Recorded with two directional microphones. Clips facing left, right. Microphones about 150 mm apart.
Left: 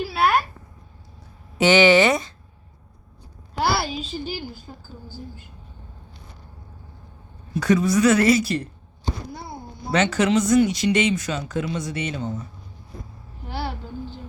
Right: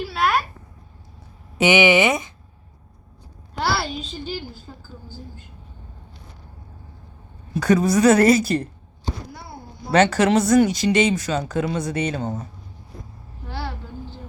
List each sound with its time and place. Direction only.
0.0 s a sound: 10° left (ahead or behind)
1.6 s speech: 15° right (ahead or behind)
3.6 s a child's voice: 10° left (ahead or behind)
7.7 s speech: 40° right (ahead or behind)
9.9 s a woman's voice: 45° right (ahead or behind)
10.8 s speech: 40° right (ahead or behind)
13.5 s a sound: 15° left (ahead or behind)